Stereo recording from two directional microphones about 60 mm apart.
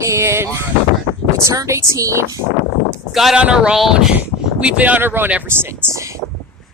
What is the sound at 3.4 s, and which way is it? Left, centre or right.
Speech, centre.